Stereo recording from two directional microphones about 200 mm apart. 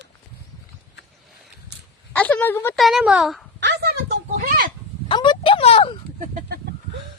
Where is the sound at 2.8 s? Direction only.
Centre (ahead or behind).